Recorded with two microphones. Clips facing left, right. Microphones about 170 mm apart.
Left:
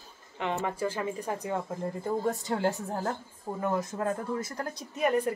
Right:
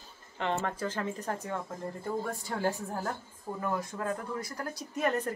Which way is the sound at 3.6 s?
20° left (ahead or behind).